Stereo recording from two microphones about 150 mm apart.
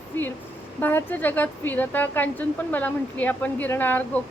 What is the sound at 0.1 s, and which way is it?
Speech, 15° left (ahead or behind).